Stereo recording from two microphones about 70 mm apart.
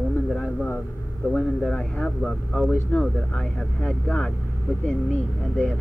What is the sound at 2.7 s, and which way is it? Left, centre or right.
Speech, left.